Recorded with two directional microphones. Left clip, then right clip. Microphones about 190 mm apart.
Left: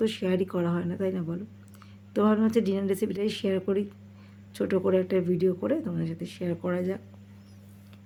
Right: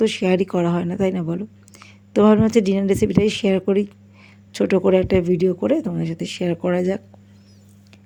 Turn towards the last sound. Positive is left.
turn(degrees=-35)  # may be behind; listen again after turning